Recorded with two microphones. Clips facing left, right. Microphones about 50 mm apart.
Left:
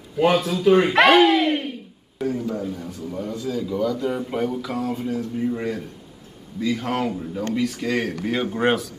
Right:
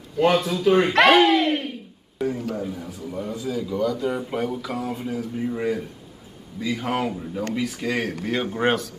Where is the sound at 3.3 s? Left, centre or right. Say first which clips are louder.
Left 1 dB; centre.